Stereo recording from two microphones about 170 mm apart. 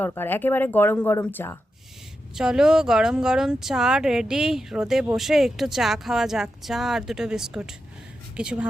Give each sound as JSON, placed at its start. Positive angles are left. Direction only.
{"t": 0.0, "sound": "speech", "side_deg": 10}
{"t": 2.3, "sound": "speech", "side_deg": -5}